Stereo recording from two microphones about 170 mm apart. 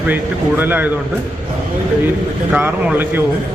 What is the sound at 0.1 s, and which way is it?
Speech, 10° right (ahead or behind).